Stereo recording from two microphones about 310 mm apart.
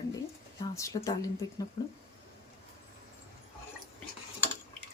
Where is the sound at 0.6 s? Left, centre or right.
Centre.